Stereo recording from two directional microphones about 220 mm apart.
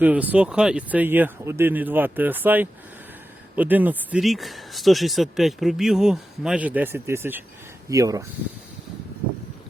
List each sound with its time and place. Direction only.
0.0 s speech: 5° right (ahead or behind)